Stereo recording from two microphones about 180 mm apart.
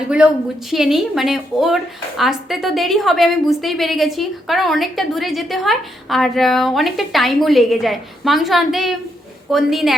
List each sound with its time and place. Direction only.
0.7 s a woman's voice: centre (ahead or behind)